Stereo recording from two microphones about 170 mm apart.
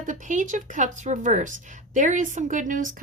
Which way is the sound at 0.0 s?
50° right (ahead or behind).